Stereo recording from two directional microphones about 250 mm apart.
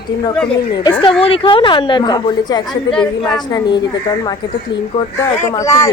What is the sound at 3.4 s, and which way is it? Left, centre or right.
Speech, centre.